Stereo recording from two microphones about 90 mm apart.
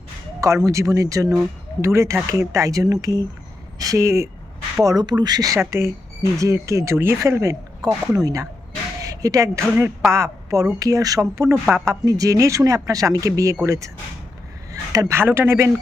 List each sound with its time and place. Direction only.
0.3 s speech: 35° right (ahead or behind)
4.8 s speech: 45° right (ahead or behind)
5.5 s speech: 30° right (ahead or behind)
9.0 s a sound: 40° right (ahead or behind)
10.1 s a woman's voice: 35° right (ahead or behind)